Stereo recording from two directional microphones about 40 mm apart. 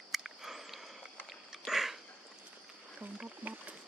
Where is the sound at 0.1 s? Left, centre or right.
Centre.